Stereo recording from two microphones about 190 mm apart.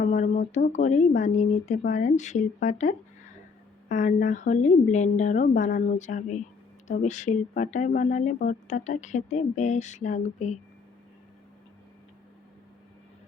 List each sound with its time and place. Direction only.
0.0 s speech: 40° left (ahead or behind)